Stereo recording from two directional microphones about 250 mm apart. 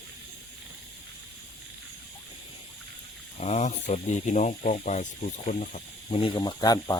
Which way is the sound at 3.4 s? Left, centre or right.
Left.